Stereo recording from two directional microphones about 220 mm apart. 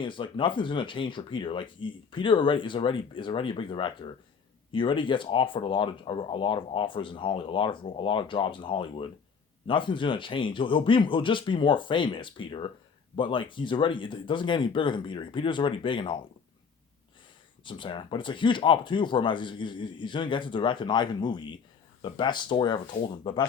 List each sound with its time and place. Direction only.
0.0 s speech: 20° left (ahead or behind)
17.6 s speech: 20° left (ahead or behind)